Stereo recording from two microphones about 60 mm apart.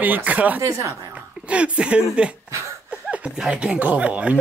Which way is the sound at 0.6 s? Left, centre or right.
Right.